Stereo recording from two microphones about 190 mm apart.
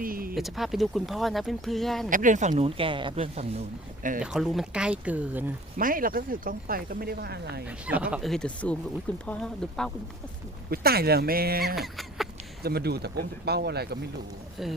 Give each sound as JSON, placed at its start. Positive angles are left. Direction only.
{"t": 0.0, "sound": "a sound", "side_deg": -50}
{"t": 0.3, "sound": "speech", "side_deg": 0}
{"t": 2.0, "sound": "speech", "side_deg": -45}
{"t": 4.2, "sound": "speech", "side_deg": 0}
{"t": 5.7, "sound": "speech", "side_deg": -45}
{"t": 7.9, "sound": "speech", "side_deg": -5}
{"t": 10.7, "sound": "speech", "side_deg": -55}
{"t": 11.8, "sound": "a sound", "side_deg": 0}
{"t": 12.6, "sound": "speech", "side_deg": -55}